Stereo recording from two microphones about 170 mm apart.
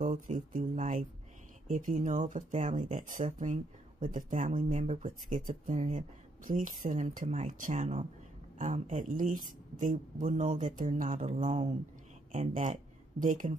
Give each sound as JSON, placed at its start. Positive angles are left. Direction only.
{"t": 0.0, "sound": "speech", "side_deg": -50}